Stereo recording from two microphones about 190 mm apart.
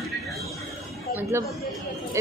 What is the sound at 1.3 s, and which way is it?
Speech, 15° right (ahead or behind).